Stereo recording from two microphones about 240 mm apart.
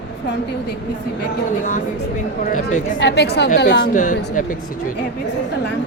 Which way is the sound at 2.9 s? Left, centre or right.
Left.